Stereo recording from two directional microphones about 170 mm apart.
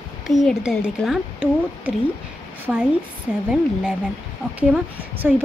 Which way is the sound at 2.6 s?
10° right (ahead or behind).